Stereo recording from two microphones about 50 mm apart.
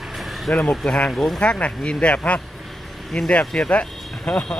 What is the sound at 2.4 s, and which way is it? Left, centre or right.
Vehicle, centre.